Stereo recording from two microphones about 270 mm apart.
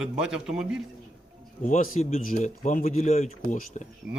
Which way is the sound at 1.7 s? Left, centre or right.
Left.